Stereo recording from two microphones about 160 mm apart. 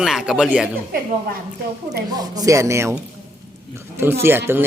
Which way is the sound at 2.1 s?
25° right (ahead or behind).